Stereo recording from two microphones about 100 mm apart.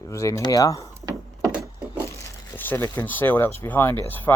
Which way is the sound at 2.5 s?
20° left (ahead or behind).